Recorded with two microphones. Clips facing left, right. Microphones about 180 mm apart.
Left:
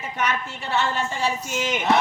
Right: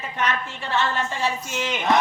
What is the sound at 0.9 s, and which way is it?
Music, 10° left (ahead or behind).